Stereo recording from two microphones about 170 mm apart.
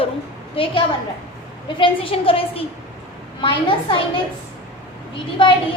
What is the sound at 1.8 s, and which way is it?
A woman's voice, 30° left (ahead or behind).